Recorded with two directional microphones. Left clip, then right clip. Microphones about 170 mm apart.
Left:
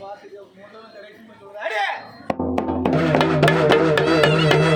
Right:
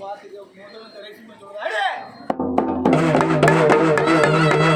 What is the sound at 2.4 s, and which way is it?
Music, 15° left (ahead or behind).